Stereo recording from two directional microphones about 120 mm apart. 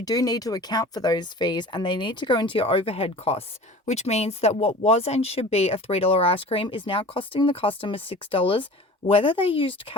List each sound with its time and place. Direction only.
0.0 s speech: 30° left (ahead or behind); by 3.4 s 55° left (ahead or behind)
3.8 s speech: 65° left (ahead or behind); by 10.0 s 50° left (ahead or behind)